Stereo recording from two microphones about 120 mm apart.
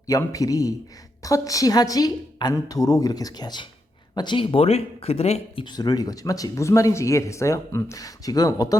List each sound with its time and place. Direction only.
0.1 s a woman's voice: 30° left (ahead or behind); by 5.6 s 55° left (ahead or behind)
5.6 s speech: 35° left (ahead or behind)